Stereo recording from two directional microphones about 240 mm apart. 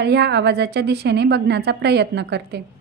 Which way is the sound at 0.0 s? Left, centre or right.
Right.